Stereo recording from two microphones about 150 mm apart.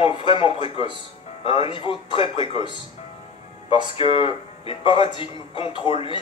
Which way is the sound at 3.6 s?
40° left (ahead or behind).